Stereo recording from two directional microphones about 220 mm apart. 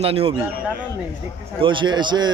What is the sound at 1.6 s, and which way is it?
Speech, 20° right (ahead or behind).